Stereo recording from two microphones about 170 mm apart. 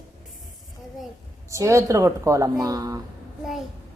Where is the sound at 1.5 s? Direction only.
20° right (ahead or behind).